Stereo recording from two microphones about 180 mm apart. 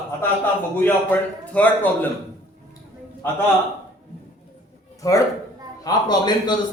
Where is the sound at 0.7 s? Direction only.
10° left (ahead or behind).